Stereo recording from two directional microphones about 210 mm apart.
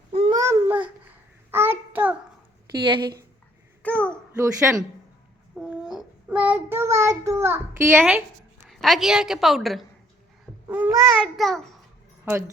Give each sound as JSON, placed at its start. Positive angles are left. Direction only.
{"t": 0.1, "sound": "babbling", "side_deg": -25}
{"t": 1.5, "sound": "child singing", "side_deg": -10}
{"t": 2.9, "sound": "speech", "side_deg": -20}
{"t": 3.8, "sound": "a sound", "side_deg": 5}
{"t": 4.6, "sound": "speech", "side_deg": -10}
{"t": 5.5, "sound": "child singing", "side_deg": -5}
{"t": 8.7, "sound": "a woman's voice", "side_deg": 0}
{"t": 12.2, "sound": "speech", "side_deg": -10}